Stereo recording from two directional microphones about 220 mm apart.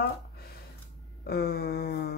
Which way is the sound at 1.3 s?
45° left (ahead or behind).